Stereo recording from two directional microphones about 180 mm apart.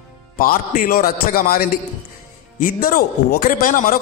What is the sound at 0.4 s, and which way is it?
A man's voice, 50° left (ahead or behind).